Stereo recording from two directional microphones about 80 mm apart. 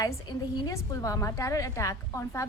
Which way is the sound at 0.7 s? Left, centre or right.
Left.